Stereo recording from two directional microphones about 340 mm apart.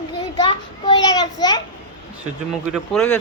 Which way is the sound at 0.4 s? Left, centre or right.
Centre.